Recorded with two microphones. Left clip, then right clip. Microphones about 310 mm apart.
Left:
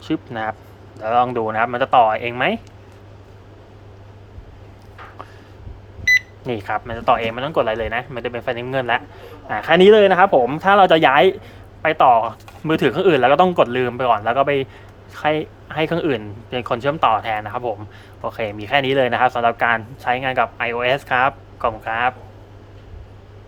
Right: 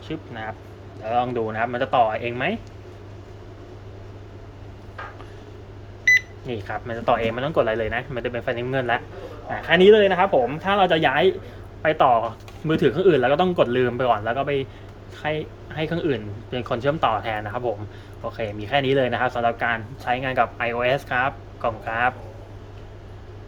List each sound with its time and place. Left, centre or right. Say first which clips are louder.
0.0 s speech: left 8 dB; centre
6.1 s microwave oven: left 2 dB; centre
6.4 s speech: left 6 dB; centre